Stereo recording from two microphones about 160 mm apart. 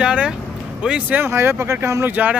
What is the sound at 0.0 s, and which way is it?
Vehicle, 5° right (ahead or behind).